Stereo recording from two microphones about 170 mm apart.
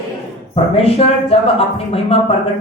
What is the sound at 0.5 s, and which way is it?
A man's voice, 35° left (ahead or behind).